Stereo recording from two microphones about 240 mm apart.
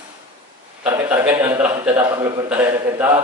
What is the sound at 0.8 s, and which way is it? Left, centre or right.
A man's voice, centre.